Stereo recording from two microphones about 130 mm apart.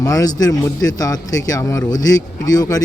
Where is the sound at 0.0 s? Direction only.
25° left (ahead or behind).